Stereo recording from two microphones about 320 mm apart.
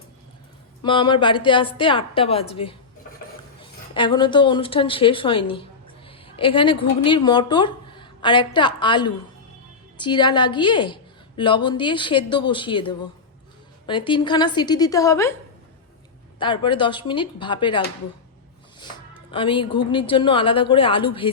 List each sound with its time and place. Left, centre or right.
0.8 s a woman's voice: centre
16.4 s a woman's voice: centre
18.8 s a sound: centre
19.9 s a woman's voice: centre